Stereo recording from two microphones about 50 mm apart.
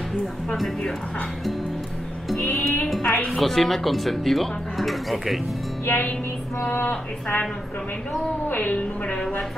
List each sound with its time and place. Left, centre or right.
0.5 s speech: centre
2.4 s music: left
3.0 s music: left
3.3 s speech: centre
5.9 s a woman's voice: left
6.9 s a woman's voice: left
8.5 s a woman's voice: left